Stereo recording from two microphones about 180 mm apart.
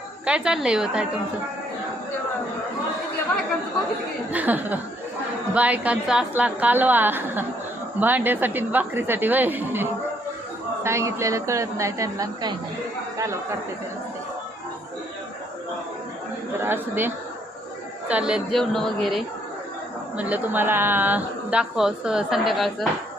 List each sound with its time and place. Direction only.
0.3 s speech: 5° right (ahead or behind)
4.3 s a woman's voice: 10° right (ahead or behind)
16.6 s a woman's voice: 10° right (ahead or behind)
18.1 s a woman's voice: 5° right (ahead or behind)